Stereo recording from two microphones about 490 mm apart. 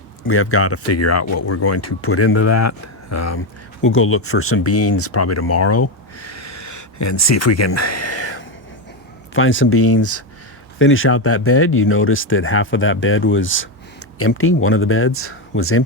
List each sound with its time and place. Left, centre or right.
0.3 s speech: left